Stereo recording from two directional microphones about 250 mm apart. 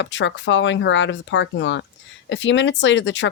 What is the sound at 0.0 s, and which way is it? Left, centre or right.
Speech, left.